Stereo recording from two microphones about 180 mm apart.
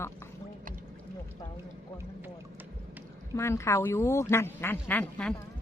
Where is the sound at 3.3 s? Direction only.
15° left (ahead or behind).